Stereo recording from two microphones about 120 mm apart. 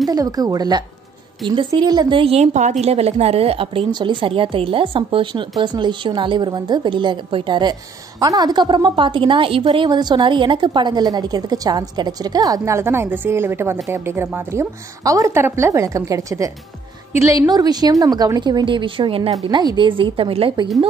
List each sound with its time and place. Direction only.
0.1 s a woman's voice: 30° right (ahead or behind); by 2.7 s 75° right (ahead or behind)
2.8 s a woman's voice: 60° right (ahead or behind)
19.5 s a woman's voice: 40° right (ahead or behind)